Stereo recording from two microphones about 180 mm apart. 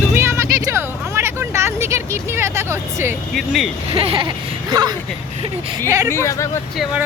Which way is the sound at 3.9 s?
30° right (ahead or behind).